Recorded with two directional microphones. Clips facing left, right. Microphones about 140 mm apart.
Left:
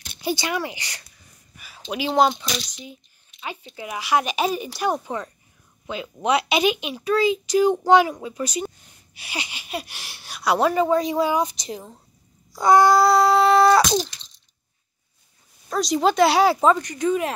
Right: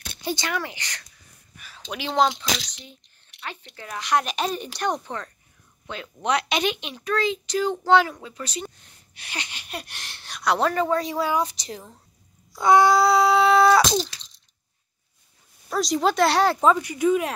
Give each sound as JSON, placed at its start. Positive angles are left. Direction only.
{"t": 0.2, "sound": "speech", "side_deg": 10}
{"t": 2.4, "sound": "speech", "side_deg": -90}
{"t": 3.3, "sound": "a sound", "side_deg": -70}
{"t": 3.7, "sound": "speech", "side_deg": 10}
{"t": 12.5, "sound": "a sound", "side_deg": 0}
{"t": 15.7, "sound": "speech", "side_deg": 0}
{"t": 16.8, "sound": "speech", "side_deg": -10}